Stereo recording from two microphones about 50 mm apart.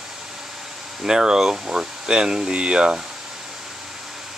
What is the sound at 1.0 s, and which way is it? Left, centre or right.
Speech, centre.